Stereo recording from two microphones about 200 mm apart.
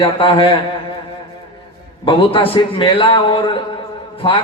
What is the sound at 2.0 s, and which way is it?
A man's voice, 25° left (ahead or behind).